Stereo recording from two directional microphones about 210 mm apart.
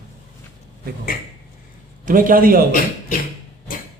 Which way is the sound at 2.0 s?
40° right (ahead or behind).